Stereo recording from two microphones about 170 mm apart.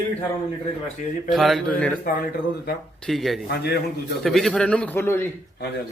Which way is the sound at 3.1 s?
Centre (ahead or behind).